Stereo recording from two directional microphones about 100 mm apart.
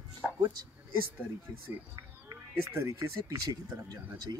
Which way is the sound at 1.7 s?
20° right (ahead or behind).